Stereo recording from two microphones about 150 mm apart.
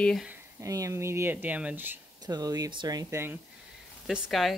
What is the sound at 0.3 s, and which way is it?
Speech, 20° right (ahead or behind).